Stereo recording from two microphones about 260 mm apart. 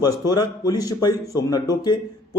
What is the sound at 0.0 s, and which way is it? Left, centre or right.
Speech, centre.